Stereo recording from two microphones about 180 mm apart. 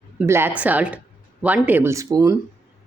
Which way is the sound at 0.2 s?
10° right (ahead or behind).